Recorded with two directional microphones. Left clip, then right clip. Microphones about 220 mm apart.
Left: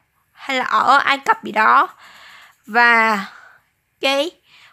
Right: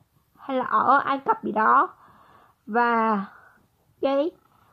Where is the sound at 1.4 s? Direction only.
20° left (ahead or behind).